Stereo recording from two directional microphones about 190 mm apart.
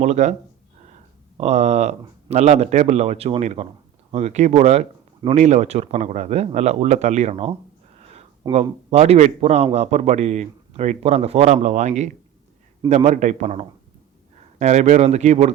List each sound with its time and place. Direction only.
0.0 s speech: 35° right (ahead or behind)
1.4 s a man's voice: 35° right (ahead or behind)